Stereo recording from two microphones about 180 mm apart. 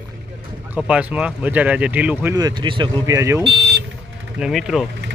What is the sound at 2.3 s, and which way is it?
Speech, 25° right (ahead or behind).